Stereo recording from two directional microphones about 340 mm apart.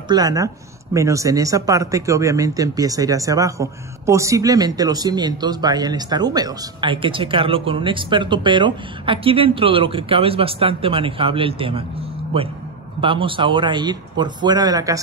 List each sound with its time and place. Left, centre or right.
0.1 s speech: centre